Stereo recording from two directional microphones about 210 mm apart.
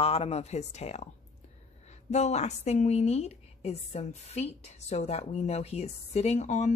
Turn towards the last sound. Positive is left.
turn(degrees=35)  # may be behind; listen again after turning